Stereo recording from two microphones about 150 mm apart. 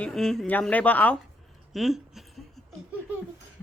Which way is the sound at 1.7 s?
Centre (ahead or behind).